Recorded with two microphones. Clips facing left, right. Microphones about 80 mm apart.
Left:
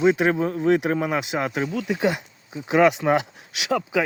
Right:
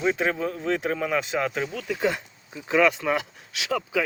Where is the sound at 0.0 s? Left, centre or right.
Left.